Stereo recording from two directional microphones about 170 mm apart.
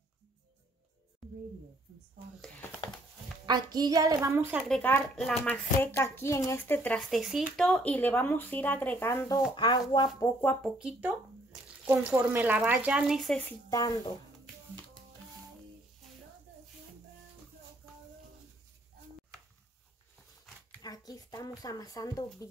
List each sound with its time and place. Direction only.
1.2 s a sound: centre (ahead or behind)
3.4 s a woman's voice: 25° right (ahead or behind)
4.6 s speech: 5° left (ahead or behind)
9.6 s speech: 25° left (ahead or behind)
10.4 s speech: 10° left (ahead or behind)
10.8 s speech: 5° right (ahead or behind)
13.5 s speech: 20° left (ahead or behind)
20.8 s speech: 20° left (ahead or behind)